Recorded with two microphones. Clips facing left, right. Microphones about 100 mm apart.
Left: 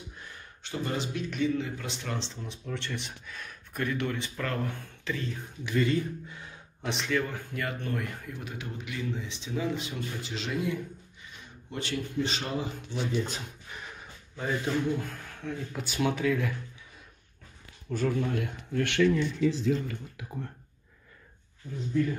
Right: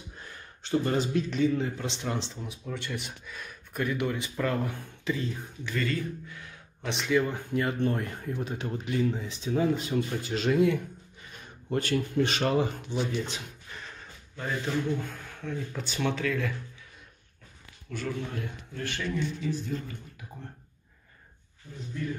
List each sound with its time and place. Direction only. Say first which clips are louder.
0.6 s a man's voice: right 6 dB; 35° right (ahead or behind); by 5.1 s 15° right (ahead or behind)
5.6 s a man's voice: left 4 dB; 15° left (ahead or behind)
6.8 s speech: even; centre (ahead or behind)
7.1 s a man's voice: right 6 dB; 20° right (ahead or behind); by 12.7 s 60° right (ahead or behind)
13.2 s speech: left 1 dB; 40° left (ahead or behind)
13.7 s speech: left 1 dB; 10° left (ahead or behind)
17.8 s a man's voice: left 5 dB; 40° left (ahead or behind)
18.3 s a man's voice: left 6 dB; 60° left (ahead or behind); by 20.2 s 90° left